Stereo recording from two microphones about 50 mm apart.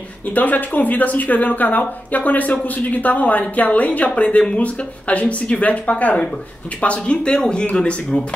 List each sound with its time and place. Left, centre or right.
0.3 s speech: left; by 8.2 s centre